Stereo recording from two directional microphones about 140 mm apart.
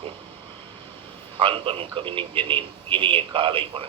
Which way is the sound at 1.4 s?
40° right (ahead or behind).